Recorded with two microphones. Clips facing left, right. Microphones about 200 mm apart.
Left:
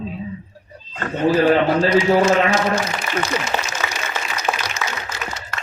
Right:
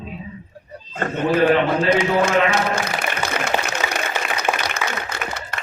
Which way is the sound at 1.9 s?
55° right (ahead or behind).